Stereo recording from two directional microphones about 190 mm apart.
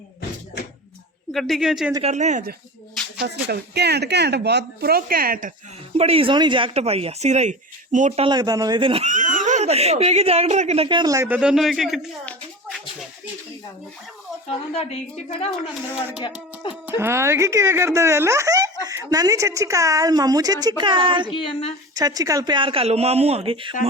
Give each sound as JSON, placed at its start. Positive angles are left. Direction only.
{"t": 1.3, "sound": "speech", "side_deg": 0}
{"t": 2.0, "sound": "speech", "side_deg": -40}
{"t": 3.2, "sound": "a woman's voice", "side_deg": -60}
{"t": 6.0, "sound": "speech", "side_deg": -30}
{"t": 14.7, "sound": "a woman's voice", "side_deg": 30}
{"t": 16.6, "sound": "a woman's voice", "side_deg": 25}
{"t": 17.0, "sound": "speech", "side_deg": -15}
{"t": 21.2, "sound": "a woman's voice", "side_deg": 25}
{"t": 21.9, "sound": "speech", "side_deg": -20}